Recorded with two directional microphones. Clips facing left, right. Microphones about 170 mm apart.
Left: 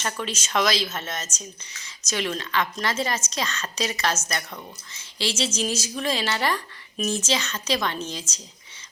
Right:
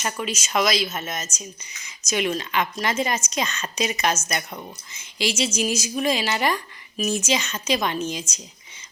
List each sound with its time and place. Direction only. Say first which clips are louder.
0.0 s speech: right 2 dB; 10° right (ahead or behind)